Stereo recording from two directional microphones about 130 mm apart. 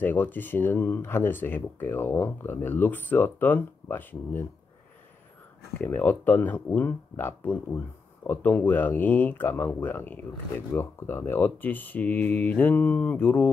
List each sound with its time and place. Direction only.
0.0 s speech: 15° left (ahead or behind)
5.8 s speech: 15° left (ahead or behind)